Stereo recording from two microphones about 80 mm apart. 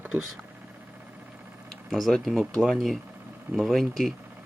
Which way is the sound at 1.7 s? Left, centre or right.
Centre.